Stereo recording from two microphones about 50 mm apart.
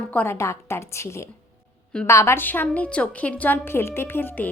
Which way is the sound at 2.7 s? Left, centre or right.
Left.